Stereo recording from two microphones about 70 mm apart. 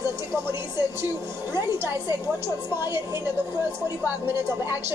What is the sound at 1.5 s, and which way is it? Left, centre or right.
A woman's voice, right.